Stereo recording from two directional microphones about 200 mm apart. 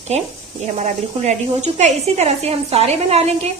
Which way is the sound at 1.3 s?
35° right (ahead or behind).